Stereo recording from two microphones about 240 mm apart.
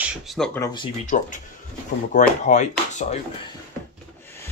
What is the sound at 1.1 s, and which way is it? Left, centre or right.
Speech, left.